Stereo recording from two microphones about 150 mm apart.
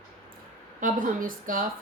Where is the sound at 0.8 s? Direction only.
65° right (ahead or behind).